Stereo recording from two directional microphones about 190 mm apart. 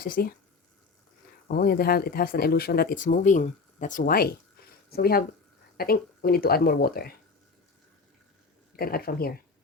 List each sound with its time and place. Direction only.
0.0 s speech: 50° left (ahead or behind)
1.5 s speech: 50° left (ahead or behind)
8.7 s speech: 50° left (ahead or behind)